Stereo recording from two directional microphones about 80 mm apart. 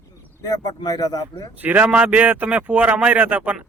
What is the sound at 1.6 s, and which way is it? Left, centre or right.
Speech, centre.